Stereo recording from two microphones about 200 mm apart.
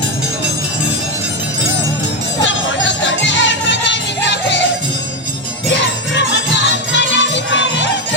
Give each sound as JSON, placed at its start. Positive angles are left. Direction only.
{"t": 2.4, "sound": "music", "side_deg": 65}
{"t": 6.9, "sound": "music", "side_deg": 65}